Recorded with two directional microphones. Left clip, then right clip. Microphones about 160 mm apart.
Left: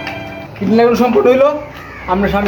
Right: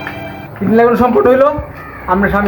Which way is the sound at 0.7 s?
Centre (ahead or behind).